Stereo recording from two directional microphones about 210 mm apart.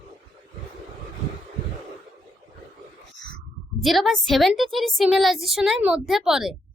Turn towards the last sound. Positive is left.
turn(degrees=0)  # may be behind; listen again after turning